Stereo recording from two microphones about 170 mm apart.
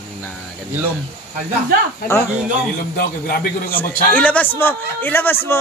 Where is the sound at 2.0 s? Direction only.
65° left (ahead or behind).